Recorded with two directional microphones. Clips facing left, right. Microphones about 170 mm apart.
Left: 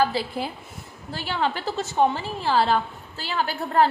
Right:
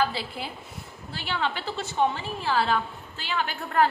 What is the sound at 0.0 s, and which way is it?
A woman's voice, 40° left (ahead or behind).